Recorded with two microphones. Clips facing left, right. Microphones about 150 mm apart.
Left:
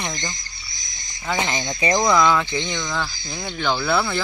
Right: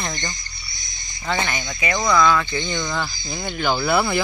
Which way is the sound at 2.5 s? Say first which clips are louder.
Right 1 dB; centre (ahead or behind).